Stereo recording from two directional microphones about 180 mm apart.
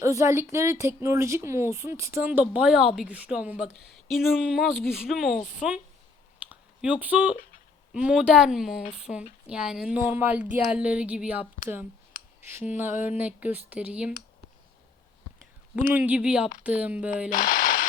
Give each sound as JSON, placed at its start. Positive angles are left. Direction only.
{"t": 0.0, "sound": "speech", "side_deg": -15}
{"t": 12.7, "sound": "speech", "side_deg": -10}
{"t": 15.4, "sound": "speech", "side_deg": -5}
{"t": 17.2, "sound": "a sound", "side_deg": 45}